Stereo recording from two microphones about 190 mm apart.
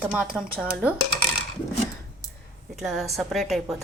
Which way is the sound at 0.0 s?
5° right (ahead or behind).